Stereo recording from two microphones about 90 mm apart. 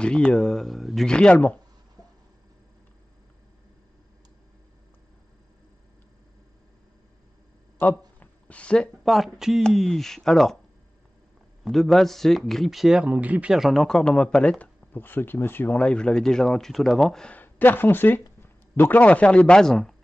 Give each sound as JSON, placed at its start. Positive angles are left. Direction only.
{"t": 0.3, "sound": "speech", "side_deg": 5}
{"t": 8.2, "sound": "a sound", "side_deg": 15}
{"t": 9.0, "sound": "speech", "side_deg": 0}
{"t": 11.6, "sound": "speech", "side_deg": 0}
{"t": 13.1, "sound": "speech", "side_deg": -15}
{"t": 13.5, "sound": "speech", "side_deg": 0}
{"t": 15.8, "sound": "speech", "side_deg": 10}
{"t": 17.4, "sound": "a man's voice", "side_deg": 20}